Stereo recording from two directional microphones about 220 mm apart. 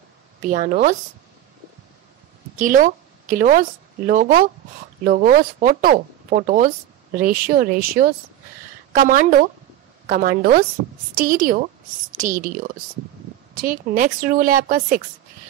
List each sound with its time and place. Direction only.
0.5 s speech: 35° right (ahead or behind)
2.6 s a woman's voice: 35° right (ahead or behind)